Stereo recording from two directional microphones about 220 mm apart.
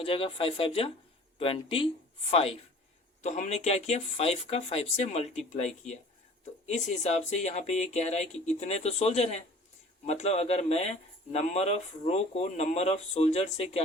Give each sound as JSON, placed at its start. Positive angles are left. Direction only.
{"t": 0.0, "sound": "speech", "side_deg": 25}